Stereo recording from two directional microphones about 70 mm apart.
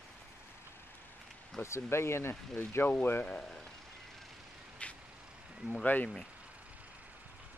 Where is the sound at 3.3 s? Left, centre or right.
Centre.